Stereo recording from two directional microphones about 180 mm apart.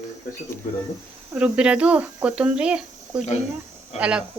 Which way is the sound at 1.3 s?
5° right (ahead or behind).